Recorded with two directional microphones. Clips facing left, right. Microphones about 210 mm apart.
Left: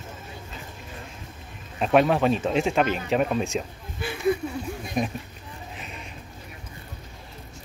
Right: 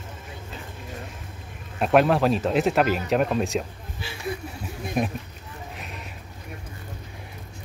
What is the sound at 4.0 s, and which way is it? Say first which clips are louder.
Speech: left 7 dB; 55° left (ahead or behind).